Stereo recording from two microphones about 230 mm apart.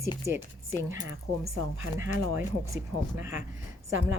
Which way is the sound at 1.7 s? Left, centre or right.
Right.